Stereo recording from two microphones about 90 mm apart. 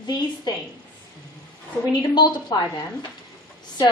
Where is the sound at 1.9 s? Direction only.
55° left (ahead or behind).